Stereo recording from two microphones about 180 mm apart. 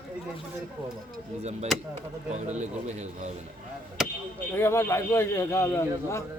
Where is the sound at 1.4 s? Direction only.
35° right (ahead or behind).